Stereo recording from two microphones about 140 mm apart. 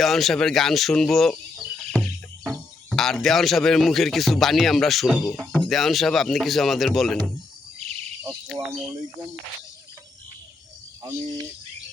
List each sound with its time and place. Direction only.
0.0 s a man's voice: centre (ahead or behind)
1.8 s music: 5° left (ahead or behind)
2.9 s a man's voice: centre (ahead or behind)
8.5 s speech: centre (ahead or behind)
11.0 s speech: 20° right (ahead or behind)